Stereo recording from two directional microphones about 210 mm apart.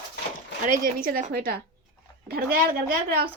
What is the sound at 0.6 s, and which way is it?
A woman's voice, 40° right (ahead or behind).